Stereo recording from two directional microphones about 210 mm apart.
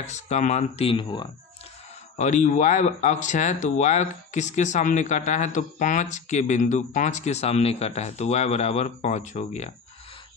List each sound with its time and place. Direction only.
0.0 s speech: 35° left (ahead or behind)
2.1 s speech: 35° left (ahead or behind)